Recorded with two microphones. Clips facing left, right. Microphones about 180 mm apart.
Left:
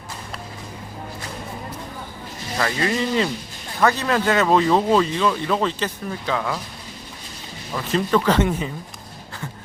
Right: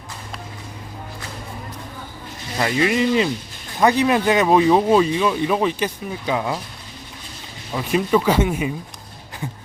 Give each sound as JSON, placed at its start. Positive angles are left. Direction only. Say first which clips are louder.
{"t": 2.9, "sound": "speech", "louder": "right 3 dB", "side_deg": -15}
{"t": 7.7, "sound": "speech", "louder": "right 2 dB", "side_deg": -15}